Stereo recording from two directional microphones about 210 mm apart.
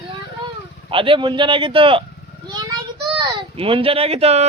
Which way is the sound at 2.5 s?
20° right (ahead or behind).